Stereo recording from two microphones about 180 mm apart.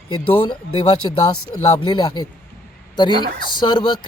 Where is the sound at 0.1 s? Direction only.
25° left (ahead or behind).